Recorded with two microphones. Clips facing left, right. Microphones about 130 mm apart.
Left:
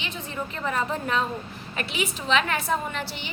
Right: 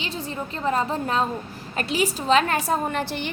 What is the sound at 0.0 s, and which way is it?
A woman's voice, 35° right (ahead or behind).